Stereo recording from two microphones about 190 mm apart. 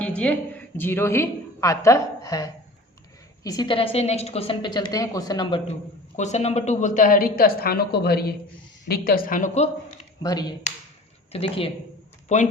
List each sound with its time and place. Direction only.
0.2 s a woman's voice: 10° left (ahead or behind); by 9.6 s 45° left (ahead or behind)
10.2 s a woman's voice: 20° left (ahead or behind); by 12.4 s 40° left (ahead or behind)